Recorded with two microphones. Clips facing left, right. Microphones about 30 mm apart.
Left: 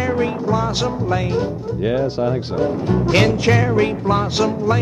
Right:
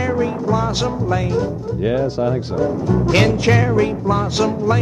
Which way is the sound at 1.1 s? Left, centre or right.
Left.